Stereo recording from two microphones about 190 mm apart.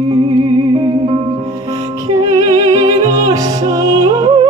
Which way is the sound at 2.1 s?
20° right (ahead or behind).